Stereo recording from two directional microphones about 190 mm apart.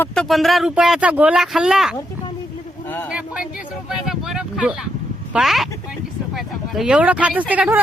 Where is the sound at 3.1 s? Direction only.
5° right (ahead or behind).